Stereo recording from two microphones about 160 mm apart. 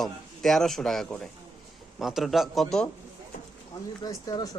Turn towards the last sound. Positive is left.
turn(degrees=25)  # may be behind; listen again after turning